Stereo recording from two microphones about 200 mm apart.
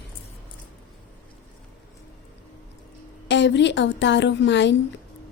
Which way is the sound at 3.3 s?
60° left (ahead or behind).